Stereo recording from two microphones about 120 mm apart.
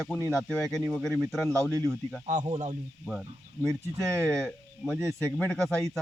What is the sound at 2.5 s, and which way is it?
Speech, 70° right (ahead or behind).